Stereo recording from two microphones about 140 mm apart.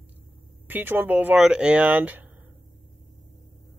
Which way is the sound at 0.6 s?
15° right (ahead or behind).